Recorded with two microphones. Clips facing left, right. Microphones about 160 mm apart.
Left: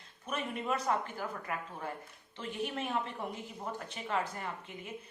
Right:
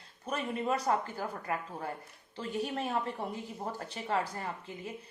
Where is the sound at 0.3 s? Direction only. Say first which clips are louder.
Right 3 dB; 35° right (ahead or behind).